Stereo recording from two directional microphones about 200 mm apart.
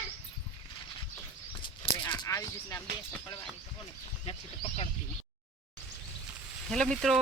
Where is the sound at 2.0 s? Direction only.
15° left (ahead or behind).